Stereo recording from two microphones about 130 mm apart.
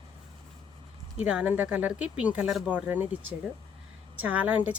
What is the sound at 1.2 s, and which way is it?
A woman's voice, 10° right (ahead or behind).